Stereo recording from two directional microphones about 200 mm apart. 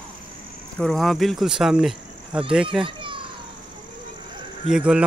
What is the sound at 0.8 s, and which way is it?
Speech, centre (ahead or behind).